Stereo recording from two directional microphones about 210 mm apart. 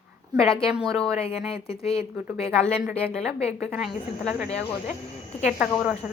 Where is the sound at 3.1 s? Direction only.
Centre (ahead or behind).